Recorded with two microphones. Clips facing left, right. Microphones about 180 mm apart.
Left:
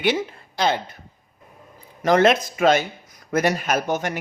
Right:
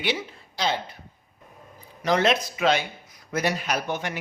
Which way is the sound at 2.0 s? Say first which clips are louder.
Left 5 dB; 50° left (ahead or behind).